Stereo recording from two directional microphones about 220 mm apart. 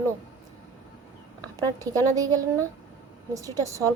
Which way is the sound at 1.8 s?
15° right (ahead or behind).